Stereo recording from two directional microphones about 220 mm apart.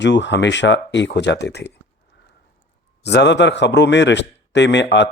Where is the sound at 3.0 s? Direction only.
50° left (ahead or behind).